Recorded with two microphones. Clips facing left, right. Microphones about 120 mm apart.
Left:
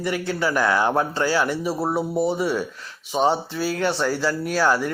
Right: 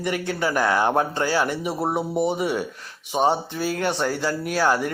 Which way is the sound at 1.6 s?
20° right (ahead or behind).